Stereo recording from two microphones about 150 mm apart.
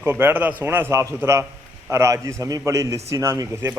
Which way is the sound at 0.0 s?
15° right (ahead or behind).